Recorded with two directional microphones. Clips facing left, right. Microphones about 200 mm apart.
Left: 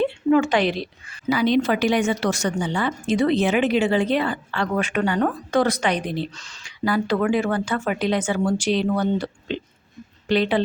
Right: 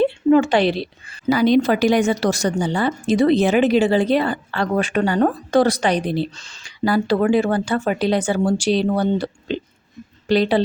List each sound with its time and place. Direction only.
0.0 s a woman's voice: 30° right (ahead or behind)